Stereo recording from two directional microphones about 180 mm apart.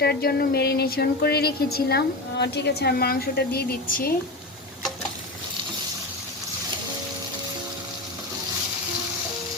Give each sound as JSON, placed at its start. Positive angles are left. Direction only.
{"t": 0.0, "sound": "speech", "side_deg": 60}